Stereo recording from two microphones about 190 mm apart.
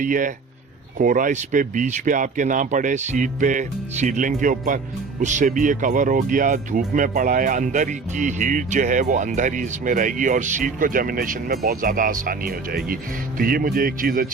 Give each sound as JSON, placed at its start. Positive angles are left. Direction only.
{"t": 0.0, "sound": "speech", "side_deg": -45}